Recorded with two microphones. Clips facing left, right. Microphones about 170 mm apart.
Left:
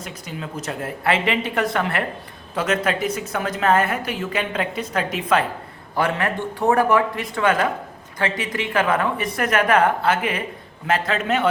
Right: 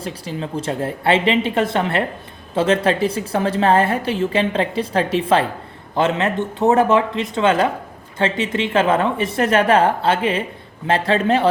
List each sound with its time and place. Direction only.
0.0 s a man's voice: 30° right (ahead or behind)